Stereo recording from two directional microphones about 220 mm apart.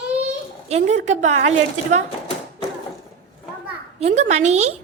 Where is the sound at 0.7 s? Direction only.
30° right (ahead or behind).